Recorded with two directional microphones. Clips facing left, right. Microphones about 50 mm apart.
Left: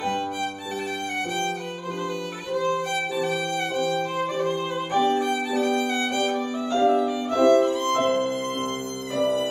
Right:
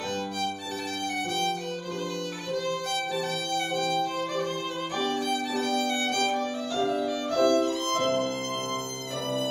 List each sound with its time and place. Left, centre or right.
2.5 s violin: left
9.2 s music: centre